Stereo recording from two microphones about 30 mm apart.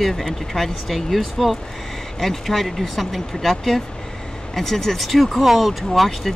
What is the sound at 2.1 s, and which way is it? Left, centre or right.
Speech, centre.